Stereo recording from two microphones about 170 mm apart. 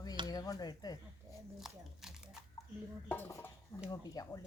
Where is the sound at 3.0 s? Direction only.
15° left (ahead or behind).